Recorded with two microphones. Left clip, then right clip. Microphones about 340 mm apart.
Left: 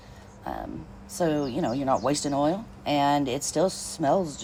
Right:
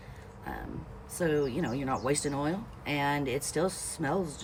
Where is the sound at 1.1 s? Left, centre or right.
Centre.